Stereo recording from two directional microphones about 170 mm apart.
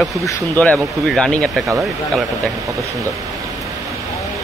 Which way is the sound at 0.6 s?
5° left (ahead or behind).